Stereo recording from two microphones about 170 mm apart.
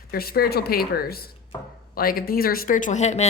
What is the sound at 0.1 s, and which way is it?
Speech, 60° left (ahead or behind).